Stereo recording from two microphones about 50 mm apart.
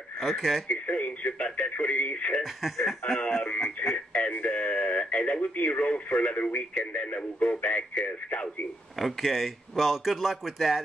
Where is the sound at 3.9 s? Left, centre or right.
Left.